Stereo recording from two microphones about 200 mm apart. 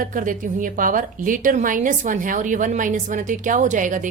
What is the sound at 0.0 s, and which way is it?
A woman's voice, 40° right (ahead or behind).